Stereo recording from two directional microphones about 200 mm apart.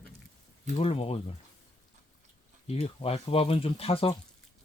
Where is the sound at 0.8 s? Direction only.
30° left (ahead or behind).